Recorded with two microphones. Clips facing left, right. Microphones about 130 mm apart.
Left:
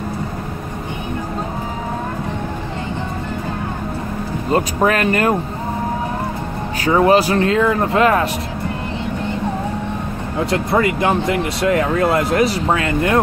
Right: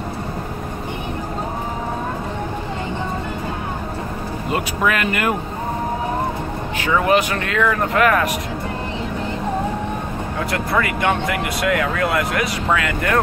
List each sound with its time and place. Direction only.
4.5 s speech: 35° left (ahead or behind)
6.8 s speech: 35° left (ahead or behind)
10.4 s speech: 25° left (ahead or behind)